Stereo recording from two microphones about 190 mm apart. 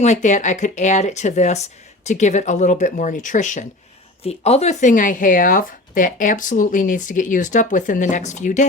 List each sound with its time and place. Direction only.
0.0 s speech: 40° left (ahead or behind)